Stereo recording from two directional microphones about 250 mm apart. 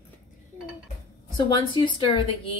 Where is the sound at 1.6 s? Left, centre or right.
Centre.